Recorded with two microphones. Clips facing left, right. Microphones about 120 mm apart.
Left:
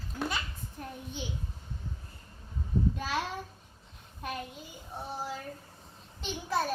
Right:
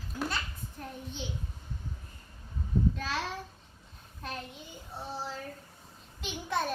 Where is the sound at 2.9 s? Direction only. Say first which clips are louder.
Left 1 dB; 10° left (ahead or behind).